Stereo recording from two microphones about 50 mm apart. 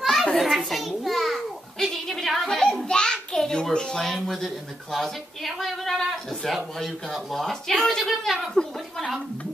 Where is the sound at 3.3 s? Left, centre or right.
Centre.